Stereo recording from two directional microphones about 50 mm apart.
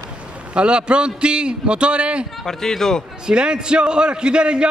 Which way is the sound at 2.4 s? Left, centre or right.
Centre.